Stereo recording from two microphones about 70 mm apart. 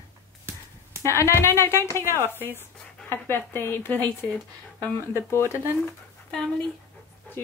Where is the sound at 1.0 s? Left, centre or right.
Left.